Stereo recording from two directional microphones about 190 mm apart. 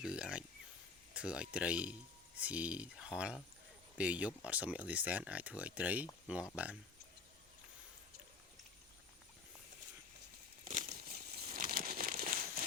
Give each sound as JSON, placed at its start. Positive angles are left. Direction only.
{"t": 0.0, "sound": "a sound", "side_deg": -5}
{"t": 1.1, "sound": "speech", "side_deg": -5}
{"t": 10.7, "sound": "crumpling", "side_deg": -45}